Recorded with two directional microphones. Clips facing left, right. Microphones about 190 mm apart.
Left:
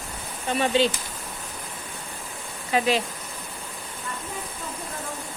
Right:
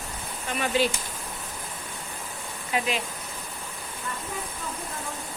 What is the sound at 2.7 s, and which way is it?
Speech, 30° left (ahead or behind).